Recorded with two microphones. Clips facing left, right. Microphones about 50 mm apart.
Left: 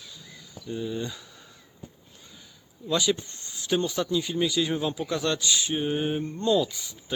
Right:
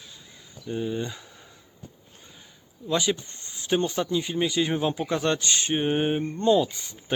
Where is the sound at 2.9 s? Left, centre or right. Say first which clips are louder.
Even; right.